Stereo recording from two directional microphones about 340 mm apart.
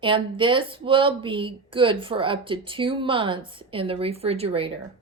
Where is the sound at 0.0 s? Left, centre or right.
Centre.